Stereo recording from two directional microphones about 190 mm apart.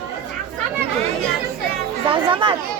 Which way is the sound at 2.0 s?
25° right (ahead or behind).